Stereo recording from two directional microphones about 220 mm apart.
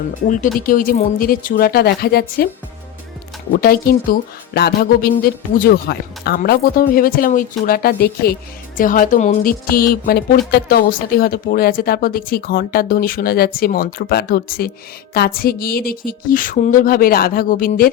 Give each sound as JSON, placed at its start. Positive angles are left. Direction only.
{"t": 0.6, "sound": "speech", "side_deg": 40}
{"t": 3.6, "sound": "speech", "side_deg": 45}